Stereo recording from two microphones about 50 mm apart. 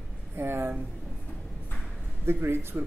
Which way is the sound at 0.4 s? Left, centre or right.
Right.